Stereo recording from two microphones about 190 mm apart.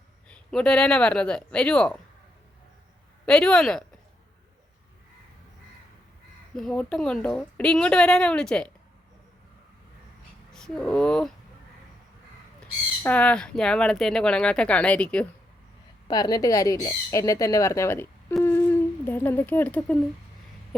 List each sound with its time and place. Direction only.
0.3 s speech: 5° left (ahead or behind)
3.2 s speech: 5° left (ahead or behind)
6.5 s speech: centre (ahead or behind)
10.5 s speech: 5° left (ahead or behind)
12.5 s speech: 10° left (ahead or behind)
16.0 s speech: 20° left (ahead or behind)
18.4 s humming: 10° left (ahead or behind)